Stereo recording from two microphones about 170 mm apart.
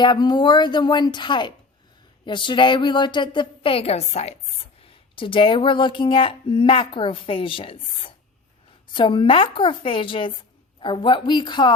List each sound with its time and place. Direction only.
0.0 s a woman's voice: 25° left (ahead or behind)